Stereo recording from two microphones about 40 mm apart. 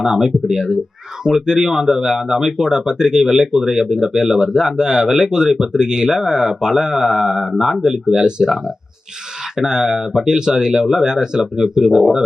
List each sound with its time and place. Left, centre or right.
0.0 s speech: centre